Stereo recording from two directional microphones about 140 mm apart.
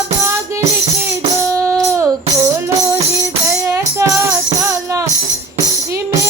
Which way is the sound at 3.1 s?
20° right (ahead or behind).